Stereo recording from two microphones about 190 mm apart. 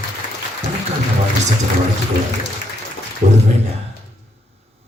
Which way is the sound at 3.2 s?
40° right (ahead or behind).